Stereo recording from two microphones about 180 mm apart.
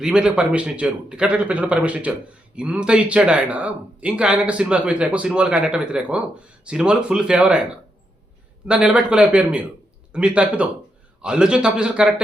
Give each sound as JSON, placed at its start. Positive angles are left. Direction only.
{"t": 0.0, "sound": "speech", "side_deg": -5}
{"t": 8.6, "sound": "speech", "side_deg": -5}